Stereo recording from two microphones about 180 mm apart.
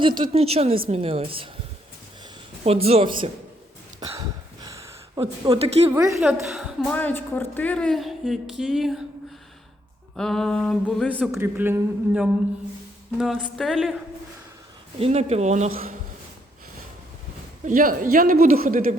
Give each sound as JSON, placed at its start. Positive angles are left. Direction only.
{"t": 0.0, "sound": "a woman's voice", "side_deg": -25}
{"t": 2.6, "sound": "a woman's voice", "side_deg": -35}
{"t": 4.2, "sound": "a sound", "side_deg": -20}
{"t": 5.2, "sound": "a woman's voice", "side_deg": -35}
{"t": 5.9, "sound": "a man's voice", "side_deg": -15}
{"t": 6.5, "sound": "a woman's voice", "side_deg": 5}
{"t": 10.2, "sound": "a woman's voice", "side_deg": 0}
{"t": 11.2, "sound": "a man's voice", "side_deg": -10}
{"t": 14.9, "sound": "a woman's voice", "side_deg": -35}
{"t": 15.7, "sound": "speech", "side_deg": -55}
{"t": 17.7, "sound": "speech", "side_deg": -50}